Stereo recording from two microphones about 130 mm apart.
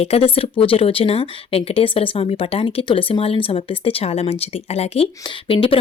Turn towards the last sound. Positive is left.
turn(degrees=45)  # may be behind; listen again after turning